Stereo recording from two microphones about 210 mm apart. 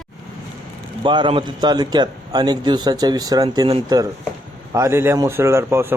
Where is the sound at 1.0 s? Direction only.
20° right (ahead or behind).